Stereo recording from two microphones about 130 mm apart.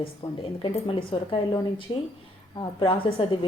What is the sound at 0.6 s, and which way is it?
A woman's voice, 45° left (ahead or behind).